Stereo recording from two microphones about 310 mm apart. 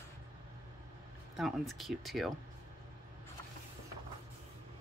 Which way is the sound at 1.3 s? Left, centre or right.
Centre.